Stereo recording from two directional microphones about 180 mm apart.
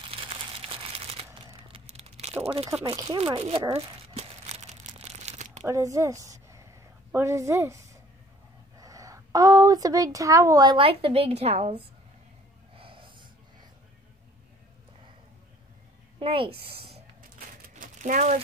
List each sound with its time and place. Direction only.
0.1 s crumpling: 30° right (ahead or behind)
2.4 s speech: 35° right (ahead or behind)
2.9 s speech: 20° right (ahead or behind)
3.7 s crumpling: 35° right (ahead or behind)
5.7 s a woman's voice: 15° right (ahead or behind); by 11.8 s 35° right (ahead or behind)
12.7 s wheeze: 30° right (ahead or behind)
16.2 s a sound: 30° right (ahead or behind)
17.6 s a sound: 45° right (ahead or behind)